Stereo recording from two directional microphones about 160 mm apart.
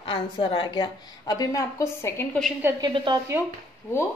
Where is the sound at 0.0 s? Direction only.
35° left (ahead or behind); by 2.2 s 15° left (ahead or behind).